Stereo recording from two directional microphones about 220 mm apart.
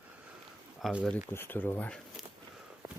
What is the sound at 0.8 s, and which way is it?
Speech, centre (ahead or behind).